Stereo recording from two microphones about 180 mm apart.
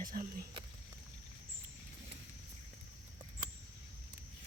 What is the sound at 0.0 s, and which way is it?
Speech, 55° right (ahead or behind).